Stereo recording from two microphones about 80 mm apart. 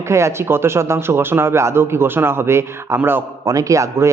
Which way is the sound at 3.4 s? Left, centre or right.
Right.